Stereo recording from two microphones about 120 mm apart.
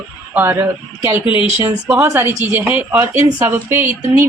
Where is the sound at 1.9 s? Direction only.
20° right (ahead or behind).